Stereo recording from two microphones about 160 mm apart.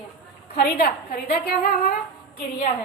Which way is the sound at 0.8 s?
75° left (ahead or behind).